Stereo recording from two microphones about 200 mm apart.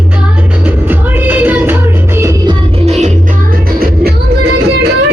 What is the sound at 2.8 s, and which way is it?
Music, 35° right (ahead or behind).